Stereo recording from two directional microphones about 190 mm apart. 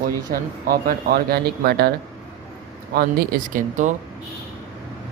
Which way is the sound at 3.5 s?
40° right (ahead or behind).